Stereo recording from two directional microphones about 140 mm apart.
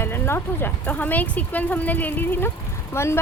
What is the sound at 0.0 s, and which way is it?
Speech, 15° left (ahead or behind).